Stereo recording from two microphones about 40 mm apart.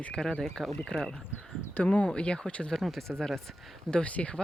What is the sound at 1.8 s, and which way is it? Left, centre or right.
Speech, left.